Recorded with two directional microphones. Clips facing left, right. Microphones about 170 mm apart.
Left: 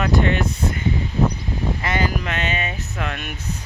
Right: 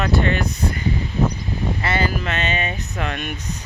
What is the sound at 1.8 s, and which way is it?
Speech, 15° left (ahead or behind).